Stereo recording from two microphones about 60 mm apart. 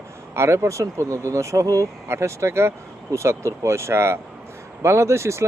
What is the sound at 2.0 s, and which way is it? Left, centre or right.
Speech, right.